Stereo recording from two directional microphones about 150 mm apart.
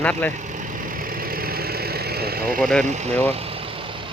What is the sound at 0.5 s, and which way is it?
Vehicle, 70° right (ahead or behind).